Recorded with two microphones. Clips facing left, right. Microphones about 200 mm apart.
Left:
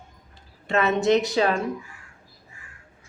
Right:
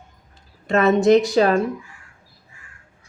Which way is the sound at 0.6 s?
45° right (ahead or behind).